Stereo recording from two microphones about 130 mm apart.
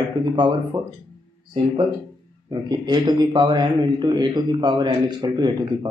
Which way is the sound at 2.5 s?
35° right (ahead or behind).